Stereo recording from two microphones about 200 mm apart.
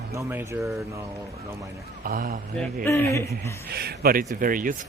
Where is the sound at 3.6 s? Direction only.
50° right (ahead or behind).